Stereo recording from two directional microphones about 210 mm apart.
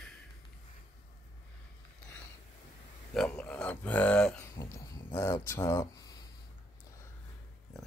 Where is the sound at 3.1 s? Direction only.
5° left (ahead or behind).